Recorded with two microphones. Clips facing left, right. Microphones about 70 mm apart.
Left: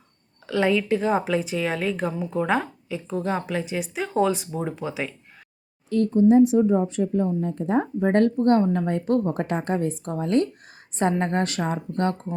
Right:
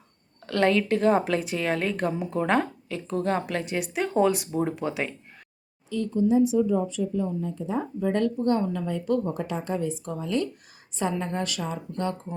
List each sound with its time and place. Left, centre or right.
0.4 s a woman's voice: centre
5.9 s speech: left